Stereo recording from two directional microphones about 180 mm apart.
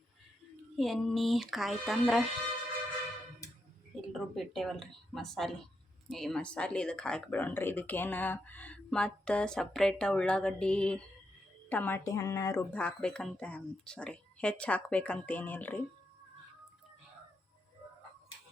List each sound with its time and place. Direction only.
0.8 s speech: centre (ahead or behind)
4.1 s speech: centre (ahead or behind)